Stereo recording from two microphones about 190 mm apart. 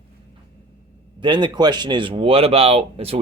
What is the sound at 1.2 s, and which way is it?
Speech, 25° right (ahead or behind).